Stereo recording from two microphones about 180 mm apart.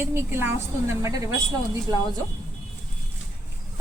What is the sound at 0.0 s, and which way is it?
A woman's voice, 15° right (ahead or behind).